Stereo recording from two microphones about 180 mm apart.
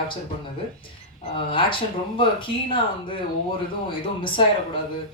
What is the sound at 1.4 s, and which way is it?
Speech, 30° left (ahead or behind).